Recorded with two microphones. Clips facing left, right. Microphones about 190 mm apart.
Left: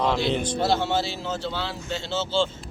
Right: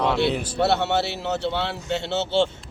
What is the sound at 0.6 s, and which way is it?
Speech, 65° right (ahead or behind).